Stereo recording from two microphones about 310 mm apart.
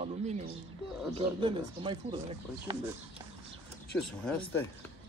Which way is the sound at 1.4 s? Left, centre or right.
Centre.